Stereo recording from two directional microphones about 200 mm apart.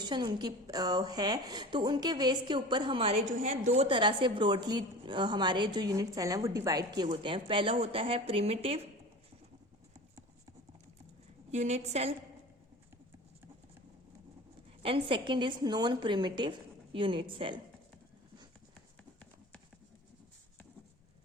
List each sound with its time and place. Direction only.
0.0 s a woman's voice: 20° right (ahead or behind)
11.5 s a woman's voice: 35° right (ahead or behind)
14.8 s a woman's voice: 25° right (ahead or behind)